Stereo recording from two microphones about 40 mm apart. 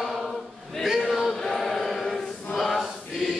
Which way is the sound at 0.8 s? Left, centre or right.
Centre.